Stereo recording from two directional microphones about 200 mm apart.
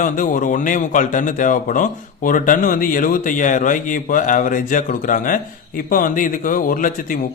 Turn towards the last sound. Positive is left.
turn(degrees=40)  # may be behind; listen again after turning